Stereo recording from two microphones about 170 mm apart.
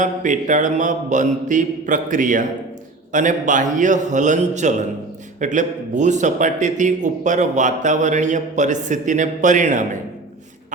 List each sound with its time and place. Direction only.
0.0 s a man's voice: 45° right (ahead or behind)